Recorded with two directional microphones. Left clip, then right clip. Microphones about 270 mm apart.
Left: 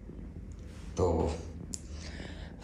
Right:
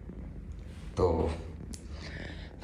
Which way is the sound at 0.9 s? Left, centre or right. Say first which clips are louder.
Right 1 dB; centre.